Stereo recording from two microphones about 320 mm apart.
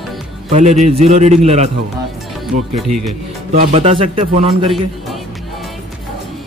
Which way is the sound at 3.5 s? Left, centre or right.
Right.